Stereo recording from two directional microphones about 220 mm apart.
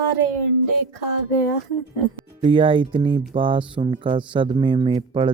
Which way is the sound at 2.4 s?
20° right (ahead or behind).